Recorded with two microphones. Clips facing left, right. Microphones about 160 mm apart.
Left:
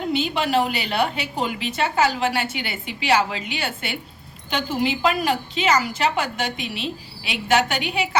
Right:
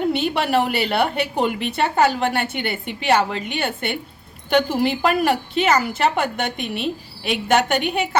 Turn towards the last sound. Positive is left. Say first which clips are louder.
# right 2 dB
turn(degrees=-50)  # may be behind; listen again after turning